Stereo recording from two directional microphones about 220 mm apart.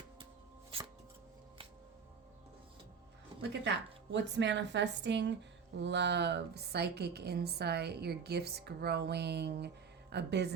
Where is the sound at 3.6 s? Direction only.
55° right (ahead or behind).